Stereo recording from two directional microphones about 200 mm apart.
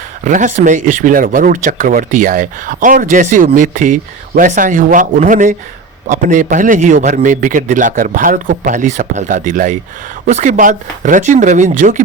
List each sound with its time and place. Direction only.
0.3 s speech: 40° right (ahead or behind)